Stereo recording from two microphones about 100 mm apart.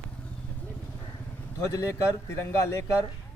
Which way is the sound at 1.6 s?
30° left (ahead or behind).